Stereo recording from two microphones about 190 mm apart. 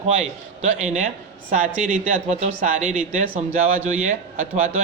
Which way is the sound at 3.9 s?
40° right (ahead or behind).